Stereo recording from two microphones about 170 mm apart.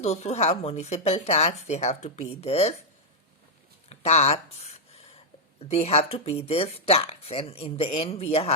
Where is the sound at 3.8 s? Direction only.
40° left (ahead or behind).